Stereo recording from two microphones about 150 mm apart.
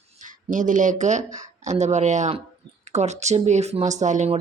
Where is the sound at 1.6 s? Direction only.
50° right (ahead or behind).